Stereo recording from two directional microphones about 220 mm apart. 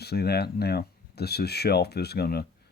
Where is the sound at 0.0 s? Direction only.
45° left (ahead or behind).